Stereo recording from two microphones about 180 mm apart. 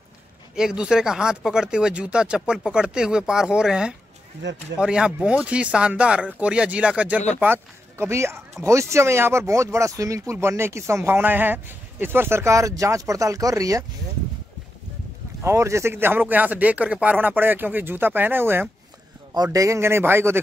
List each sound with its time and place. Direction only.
0.6 s speech: 5° right (ahead or behind)
15.4 s speech: 15° right (ahead or behind)